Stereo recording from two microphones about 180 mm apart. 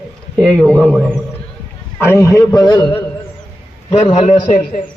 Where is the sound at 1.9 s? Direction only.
15° left (ahead or behind).